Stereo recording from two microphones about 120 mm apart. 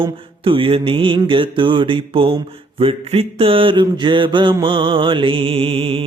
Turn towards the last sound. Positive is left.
turn(degrees=-50)  # may be behind; listen again after turning